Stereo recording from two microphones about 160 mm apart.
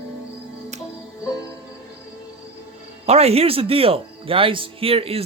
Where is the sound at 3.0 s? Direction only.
40° right (ahead or behind).